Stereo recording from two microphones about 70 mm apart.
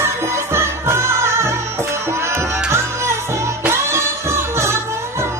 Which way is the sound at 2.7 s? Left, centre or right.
Right.